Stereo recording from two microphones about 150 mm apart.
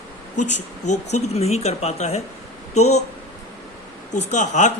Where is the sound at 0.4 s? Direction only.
55° left (ahead or behind).